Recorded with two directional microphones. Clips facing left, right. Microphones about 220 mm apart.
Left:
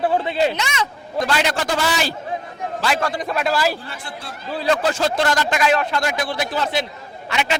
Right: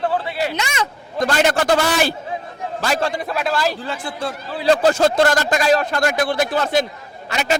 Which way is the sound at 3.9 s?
90° right.